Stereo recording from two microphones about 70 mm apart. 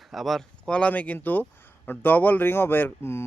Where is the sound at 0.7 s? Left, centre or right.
Centre.